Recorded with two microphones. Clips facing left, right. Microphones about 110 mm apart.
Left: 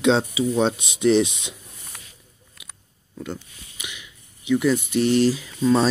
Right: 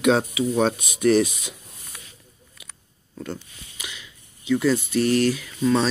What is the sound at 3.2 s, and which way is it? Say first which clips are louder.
Speech: even; 15° left (ahead or behind).